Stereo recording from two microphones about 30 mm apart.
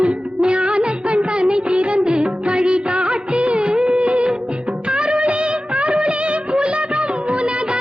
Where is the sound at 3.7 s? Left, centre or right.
Right.